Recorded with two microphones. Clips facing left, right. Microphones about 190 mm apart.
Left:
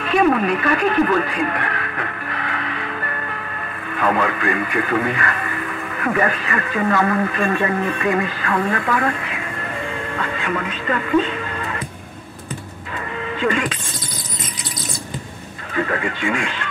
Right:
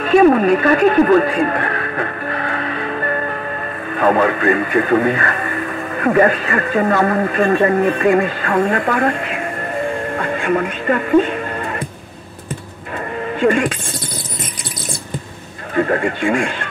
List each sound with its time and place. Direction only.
0.0 s music: 40° right (ahead or behind)
3.9 s speech: 35° right (ahead or behind)
12.9 s a sound: 45° right (ahead or behind)
15.7 s speech: 40° right (ahead or behind)